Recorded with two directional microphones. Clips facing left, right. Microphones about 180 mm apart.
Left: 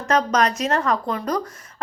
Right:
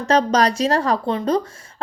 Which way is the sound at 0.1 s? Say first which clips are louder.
Right 3 dB; 30° right (ahead or behind).